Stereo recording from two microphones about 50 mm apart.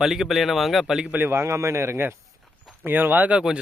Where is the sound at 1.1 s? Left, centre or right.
Right.